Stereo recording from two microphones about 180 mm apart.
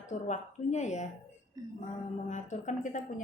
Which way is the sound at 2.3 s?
40° left (ahead or behind).